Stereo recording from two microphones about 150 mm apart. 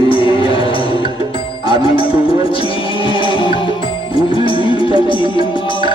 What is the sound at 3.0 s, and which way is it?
Music, 35° left (ahead or behind).